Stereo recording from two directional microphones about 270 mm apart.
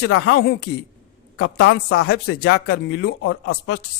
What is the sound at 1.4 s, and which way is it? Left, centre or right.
Speech, left.